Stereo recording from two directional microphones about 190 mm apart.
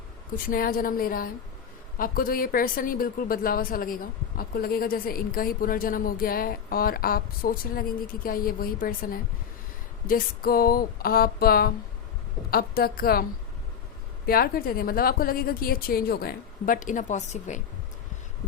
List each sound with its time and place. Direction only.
0.3 s a woman's voice: 50° left (ahead or behind)
14.3 s a woman's voice: 50° left (ahead or behind)